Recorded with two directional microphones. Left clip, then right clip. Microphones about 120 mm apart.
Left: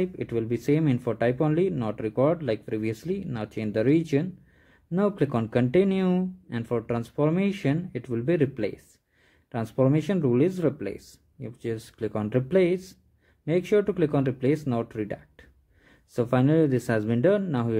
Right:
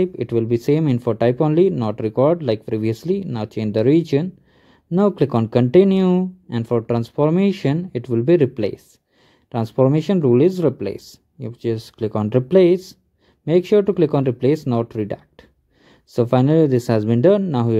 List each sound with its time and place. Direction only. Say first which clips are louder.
0.0 s speech: right 8 dB; 30° right (ahead or behind)